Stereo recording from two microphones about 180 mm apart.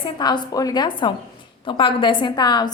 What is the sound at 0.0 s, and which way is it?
A woman's voice, 25° left (ahead or behind).